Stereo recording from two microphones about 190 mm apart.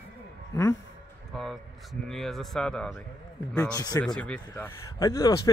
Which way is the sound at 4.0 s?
5° left (ahead or behind).